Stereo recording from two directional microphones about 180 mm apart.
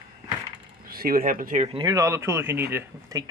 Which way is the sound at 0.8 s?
55° right (ahead or behind).